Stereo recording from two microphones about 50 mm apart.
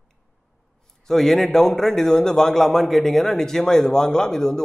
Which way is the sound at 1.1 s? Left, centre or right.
Centre.